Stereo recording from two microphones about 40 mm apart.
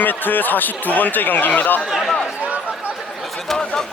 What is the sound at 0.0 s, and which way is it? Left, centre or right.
A man's voice, left.